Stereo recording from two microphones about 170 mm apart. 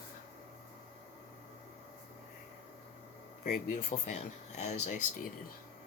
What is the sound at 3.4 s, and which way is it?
Speech, 55° left (ahead or behind).